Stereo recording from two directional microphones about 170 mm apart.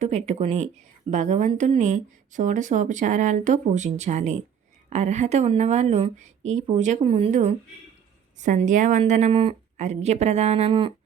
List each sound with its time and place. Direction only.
0.0 s speech: 40° right (ahead or behind)
9.3 s speech: 30° right (ahead or behind)